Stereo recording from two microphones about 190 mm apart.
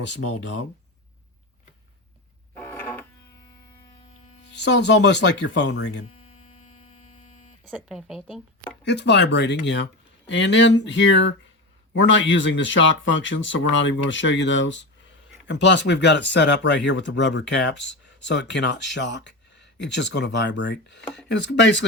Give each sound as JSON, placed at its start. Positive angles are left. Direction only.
{"t": 0.1, "sound": "speech", "side_deg": 75}
{"t": 2.6, "sound": "music", "side_deg": 10}
{"t": 4.5, "sound": "speech", "side_deg": 65}
{"t": 6.1, "sound": "mains hum", "side_deg": 30}
{"t": 7.6, "sound": "a woman's voice", "side_deg": -5}
{"t": 8.8, "sound": "speech", "side_deg": 65}